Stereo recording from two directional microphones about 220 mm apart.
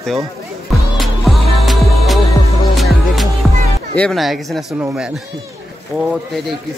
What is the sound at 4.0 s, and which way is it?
Speech, centre (ahead or behind).